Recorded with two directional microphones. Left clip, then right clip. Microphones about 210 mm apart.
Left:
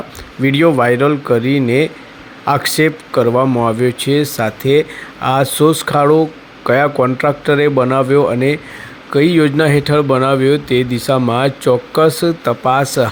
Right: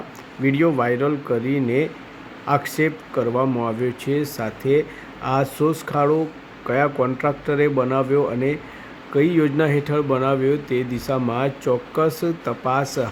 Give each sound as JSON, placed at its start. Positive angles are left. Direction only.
{"t": 0.4, "sound": "speech", "side_deg": 20}